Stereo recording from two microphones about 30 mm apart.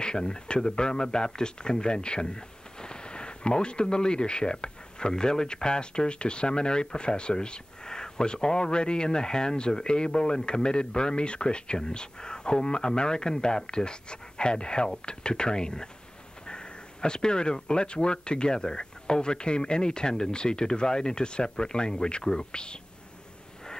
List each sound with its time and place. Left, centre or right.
0.0 s speech: left
16.4 s a sound: left
17.6 s speech: left